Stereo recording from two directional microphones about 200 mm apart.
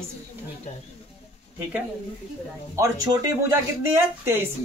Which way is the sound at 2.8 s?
15° right (ahead or behind).